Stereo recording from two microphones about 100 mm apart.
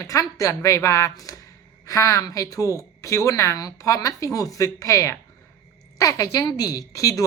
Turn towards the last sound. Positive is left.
turn(degrees=35)  # may be behind; listen again after turning